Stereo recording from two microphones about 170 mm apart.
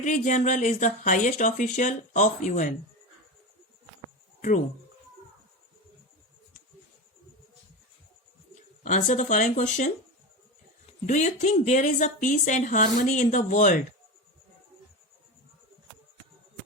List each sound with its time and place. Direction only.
0.0 s speech: 50° left (ahead or behind)
4.4 s a sound: 50° left (ahead or behind)
8.8 s speech: 45° left (ahead or behind)
11.0 s speech: 45° left (ahead or behind)